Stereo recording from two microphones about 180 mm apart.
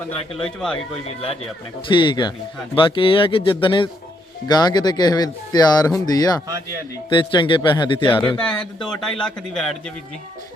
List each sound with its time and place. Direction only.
0.1 s speech: 30° left (ahead or behind)
0.4 s speech: 5° left (ahead or behind)
1.9 s speech: 25° left (ahead or behind)
8.4 s speech: 5° left (ahead or behind)